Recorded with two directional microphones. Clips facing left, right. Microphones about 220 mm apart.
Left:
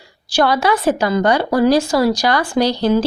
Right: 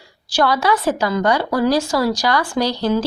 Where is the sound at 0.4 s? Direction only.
20° left (ahead or behind).